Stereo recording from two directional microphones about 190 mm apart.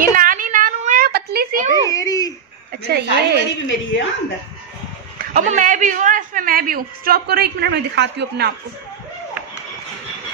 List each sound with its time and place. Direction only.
0.1 s a sound: 45° right (ahead or behind)
1.9 s babbling: 20° left (ahead or behind)
2.9 s a woman's voice: 60° right (ahead or behind)
3.6 s a woman's voice: 75° left (ahead or behind)
5.2 s a man's voice: 45° right (ahead or behind); by 8.5 s 60° right (ahead or behind)